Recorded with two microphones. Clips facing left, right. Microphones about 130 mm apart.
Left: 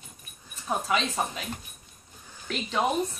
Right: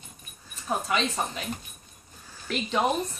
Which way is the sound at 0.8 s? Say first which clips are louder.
Left 1 dB; 5° left (ahead or behind).